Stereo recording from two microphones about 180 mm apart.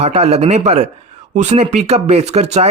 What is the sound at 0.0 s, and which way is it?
Speech, 35° right (ahead or behind).